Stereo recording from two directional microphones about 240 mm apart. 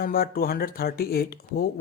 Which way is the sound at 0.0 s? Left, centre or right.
Left.